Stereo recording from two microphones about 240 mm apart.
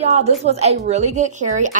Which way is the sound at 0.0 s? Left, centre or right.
Right.